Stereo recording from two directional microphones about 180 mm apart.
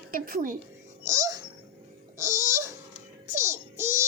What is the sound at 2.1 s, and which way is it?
Babbling, 15° right (ahead or behind).